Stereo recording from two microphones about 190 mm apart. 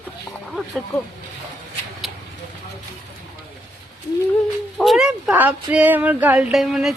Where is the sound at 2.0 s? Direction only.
Centre (ahead or behind).